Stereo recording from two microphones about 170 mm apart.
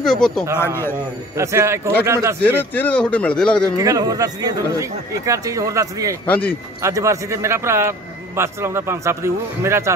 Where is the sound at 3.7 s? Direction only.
20° right (ahead or behind).